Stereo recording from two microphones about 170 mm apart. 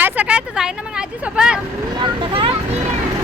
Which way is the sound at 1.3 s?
5° right (ahead or behind).